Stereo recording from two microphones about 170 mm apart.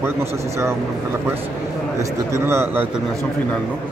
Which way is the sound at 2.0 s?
15° right (ahead or behind).